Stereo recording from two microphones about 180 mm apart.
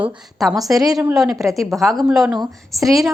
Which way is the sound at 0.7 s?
20° right (ahead or behind).